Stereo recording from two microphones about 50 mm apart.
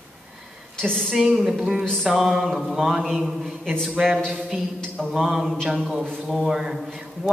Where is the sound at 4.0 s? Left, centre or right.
Centre.